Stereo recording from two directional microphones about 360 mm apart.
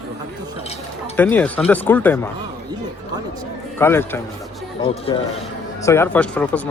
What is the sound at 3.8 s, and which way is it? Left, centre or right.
Speech, centre.